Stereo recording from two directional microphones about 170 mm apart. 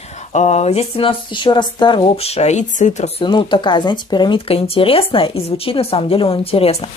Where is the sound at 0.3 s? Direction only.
40° left (ahead or behind).